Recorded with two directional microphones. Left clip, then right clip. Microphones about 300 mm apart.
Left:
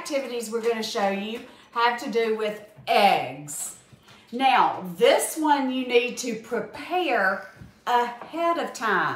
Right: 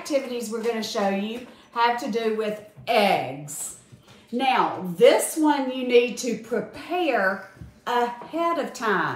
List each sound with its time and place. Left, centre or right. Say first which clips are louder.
0.0 s a woman's voice: right 2 dB; centre